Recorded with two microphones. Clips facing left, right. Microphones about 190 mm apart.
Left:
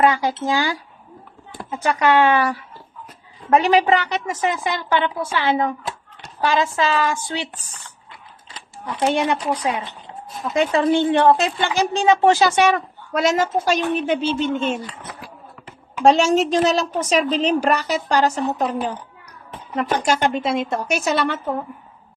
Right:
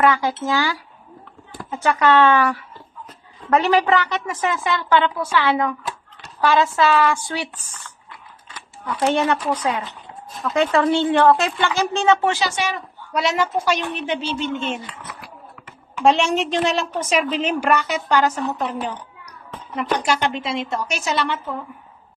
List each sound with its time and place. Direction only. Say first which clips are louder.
0.0 s a woman's voice: left 1 dB; 20° left (ahead or behind)
12.3 s a woman's voice: left 7 dB; 50° left (ahead or behind)
16.0 s a woman's voice: left 3 dB; 40° left (ahead or behind)
19.7 s a woman's voice: left 1 dB; 45° left (ahead or behind)